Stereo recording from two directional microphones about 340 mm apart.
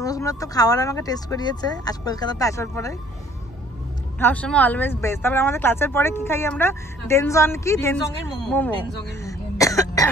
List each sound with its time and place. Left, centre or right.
0.0 s speech: centre
4.2 s speech: centre
9.2 s cough: centre